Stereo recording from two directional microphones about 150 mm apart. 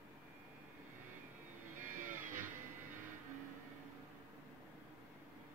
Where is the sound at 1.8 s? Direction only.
60° right (ahead or behind).